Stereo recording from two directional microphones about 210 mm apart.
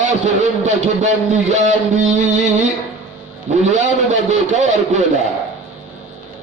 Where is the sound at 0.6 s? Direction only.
35° right (ahead or behind).